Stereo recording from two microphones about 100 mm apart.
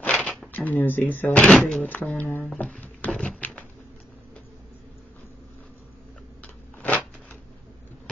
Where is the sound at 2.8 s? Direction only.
15° left (ahead or behind).